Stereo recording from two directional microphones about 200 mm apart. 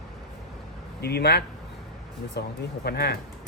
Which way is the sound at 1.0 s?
55° left (ahead or behind).